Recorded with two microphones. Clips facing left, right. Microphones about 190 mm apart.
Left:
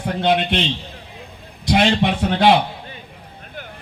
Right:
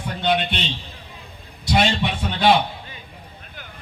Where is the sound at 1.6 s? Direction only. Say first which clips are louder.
Left 4 dB; 85° left.